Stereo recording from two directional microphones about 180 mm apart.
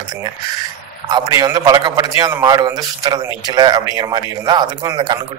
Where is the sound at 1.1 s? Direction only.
20° right (ahead or behind).